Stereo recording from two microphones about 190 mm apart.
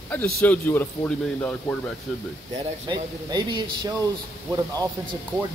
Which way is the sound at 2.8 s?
20° right (ahead or behind).